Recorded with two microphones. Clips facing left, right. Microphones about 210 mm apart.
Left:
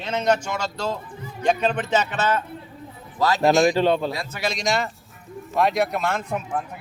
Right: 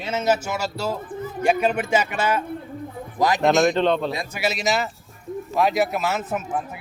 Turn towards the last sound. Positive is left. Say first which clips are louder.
# right 1 dB
turn(degrees=-5)  # may be behind; listen again after turning